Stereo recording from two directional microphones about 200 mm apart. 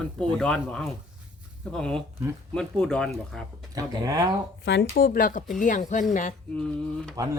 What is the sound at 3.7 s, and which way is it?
Speech, 20° right (ahead or behind).